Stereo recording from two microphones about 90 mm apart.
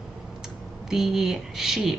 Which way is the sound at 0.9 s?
5° right (ahead or behind).